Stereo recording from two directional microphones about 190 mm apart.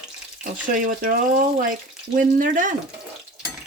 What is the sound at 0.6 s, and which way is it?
A woman's voice, 45° right (ahead or behind).